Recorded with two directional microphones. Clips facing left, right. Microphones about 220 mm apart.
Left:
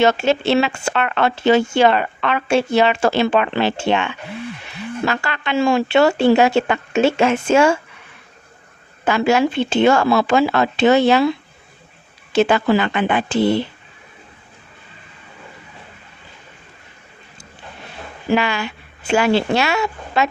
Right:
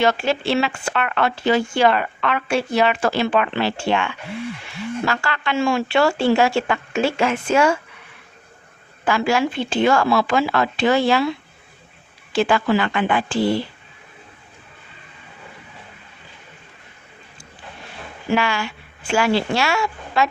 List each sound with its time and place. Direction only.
0.0 s speech: 25° left (ahead or behind)
9.0 s speech: 20° left (ahead or behind)
12.3 s speech: 20° left (ahead or behind)
18.3 s speech: 20° left (ahead or behind)